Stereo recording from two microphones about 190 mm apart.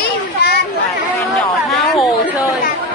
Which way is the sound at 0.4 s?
60° left (ahead or behind).